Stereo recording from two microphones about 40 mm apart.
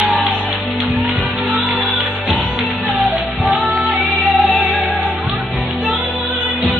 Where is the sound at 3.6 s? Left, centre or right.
Right.